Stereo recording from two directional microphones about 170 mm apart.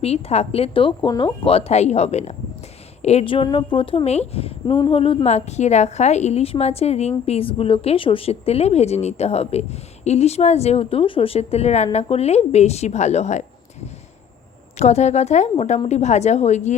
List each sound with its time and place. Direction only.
0.0 s a woman's voice: 40° left (ahead or behind)
4.6 s a woman's voice: 25° left (ahead or behind); by 13.4 s 40° left (ahead or behind)
14.8 s a woman's voice: 40° left (ahead or behind)